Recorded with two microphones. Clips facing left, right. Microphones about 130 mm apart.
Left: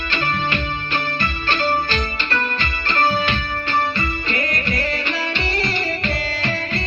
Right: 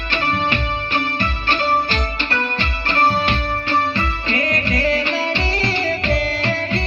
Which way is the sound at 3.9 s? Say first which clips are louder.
Right 2 dB; 90° right.